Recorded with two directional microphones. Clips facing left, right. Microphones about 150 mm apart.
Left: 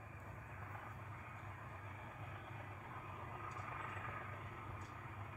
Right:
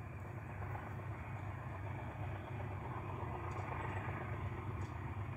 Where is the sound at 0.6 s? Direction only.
45° right (ahead or behind).